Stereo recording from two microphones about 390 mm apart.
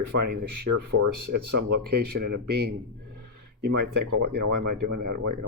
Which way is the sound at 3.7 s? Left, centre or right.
Right.